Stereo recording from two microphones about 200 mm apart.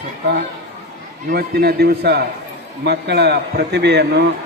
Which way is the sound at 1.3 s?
50° right (ahead or behind).